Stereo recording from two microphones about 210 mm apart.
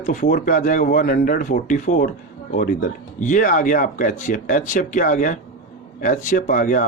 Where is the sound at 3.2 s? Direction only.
40° left (ahead or behind).